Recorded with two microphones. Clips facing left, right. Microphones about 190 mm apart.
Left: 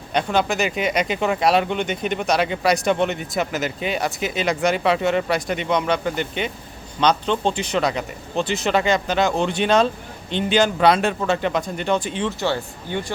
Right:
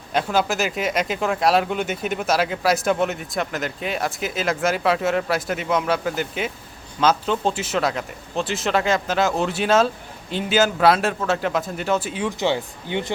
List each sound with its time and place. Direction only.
0.1 s speech: centre (ahead or behind)
12.4 s speech: 15° right (ahead or behind)